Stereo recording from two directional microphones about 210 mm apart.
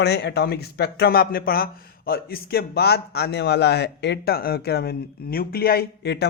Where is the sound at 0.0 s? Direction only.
50° left (ahead or behind).